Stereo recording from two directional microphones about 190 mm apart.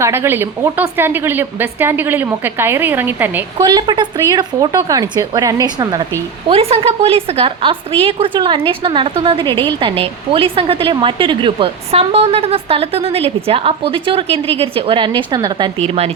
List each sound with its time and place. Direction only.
0.0 s a woman's voice: 15° right (ahead or behind)
3.6 s a woman's voice: 20° right (ahead or behind)
6.5 s a woman's voice: 30° right (ahead or behind)